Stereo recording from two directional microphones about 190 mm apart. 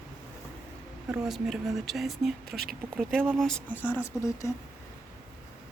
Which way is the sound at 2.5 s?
55° right (ahead or behind).